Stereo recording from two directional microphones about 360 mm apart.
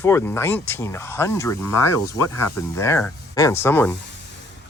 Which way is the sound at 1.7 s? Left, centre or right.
Left.